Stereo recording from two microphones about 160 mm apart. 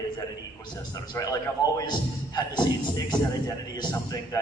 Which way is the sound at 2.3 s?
25° left (ahead or behind).